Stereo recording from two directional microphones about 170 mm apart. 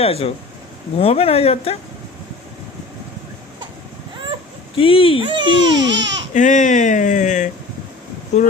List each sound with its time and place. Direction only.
0.0 s speech: 35° left (ahead or behind)
4.8 s speech: 35° left (ahead or behind)
5.2 s speech: 30° right (ahead or behind)
5.9 s speech: 90° right
6.3 s speech: 50° left (ahead or behind)